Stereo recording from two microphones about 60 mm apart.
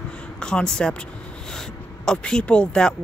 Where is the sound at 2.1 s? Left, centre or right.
Centre.